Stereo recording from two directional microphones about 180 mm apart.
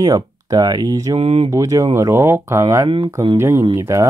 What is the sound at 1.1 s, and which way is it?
Speech, 30° right (ahead or behind).